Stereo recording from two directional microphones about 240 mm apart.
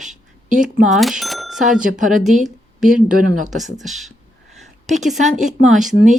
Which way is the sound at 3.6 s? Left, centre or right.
Centre.